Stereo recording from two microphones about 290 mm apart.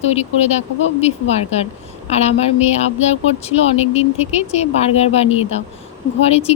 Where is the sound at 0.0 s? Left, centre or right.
Left.